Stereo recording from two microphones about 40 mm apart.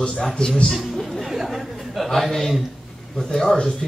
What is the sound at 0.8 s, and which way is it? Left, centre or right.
Chatter, centre.